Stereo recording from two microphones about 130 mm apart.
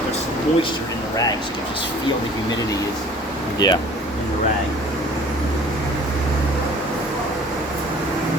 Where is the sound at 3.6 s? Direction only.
30° left (ahead or behind).